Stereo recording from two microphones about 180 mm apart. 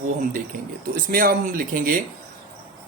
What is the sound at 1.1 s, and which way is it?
Speech, 50° right (ahead or behind).